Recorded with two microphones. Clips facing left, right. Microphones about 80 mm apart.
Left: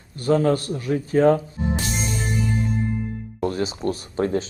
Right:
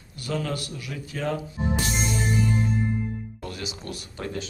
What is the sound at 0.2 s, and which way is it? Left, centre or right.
Speech, left.